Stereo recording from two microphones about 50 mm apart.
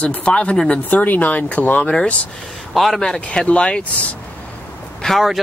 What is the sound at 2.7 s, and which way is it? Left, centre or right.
Speech, centre.